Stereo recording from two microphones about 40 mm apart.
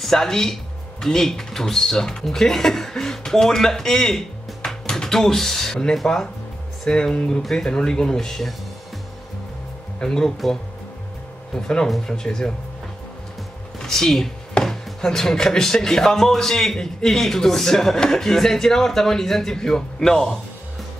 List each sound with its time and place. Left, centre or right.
0.0 s speech: centre
6.0 s speech: centre
9.9 s speech: centre
11.5 s speech: centre
13.7 s speech: centre